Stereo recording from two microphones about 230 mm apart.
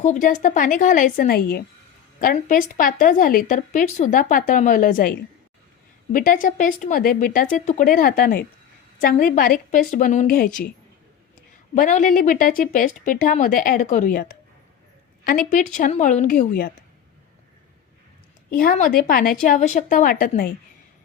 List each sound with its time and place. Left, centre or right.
0.0 s a woman's voice: left
11.7 s a woman's voice: left
18.5 s a woman's voice: left